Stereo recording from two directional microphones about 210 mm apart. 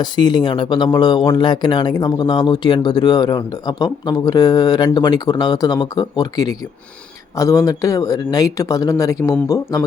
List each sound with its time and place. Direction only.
0.0 s speech: 20° left (ahead or behind)